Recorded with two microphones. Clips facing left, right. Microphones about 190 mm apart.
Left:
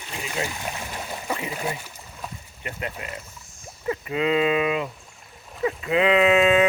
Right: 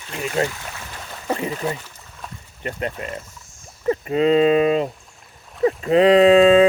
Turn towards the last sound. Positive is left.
turn(degrees=-30)  # may be behind; listen again after turning